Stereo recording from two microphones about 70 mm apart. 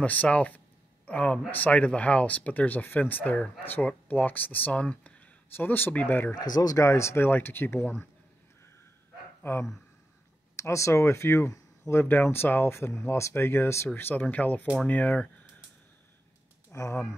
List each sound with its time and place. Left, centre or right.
0.0 s speech: left
6.5 s speech: left
6.9 s speech: left
9.4 s speech: left
12.0 s speech: left
16.7 s speech: left